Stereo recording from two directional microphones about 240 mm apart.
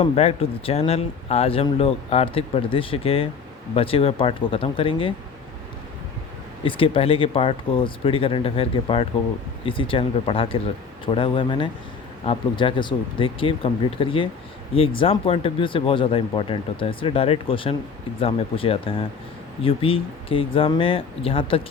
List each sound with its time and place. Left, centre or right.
0.0 s speech: left
6.7 s speech: left